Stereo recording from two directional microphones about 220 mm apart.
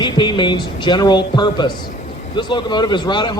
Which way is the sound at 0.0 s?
20° left (ahead or behind).